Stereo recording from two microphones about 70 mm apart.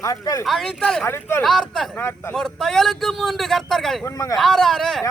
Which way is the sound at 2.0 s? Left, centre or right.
Left.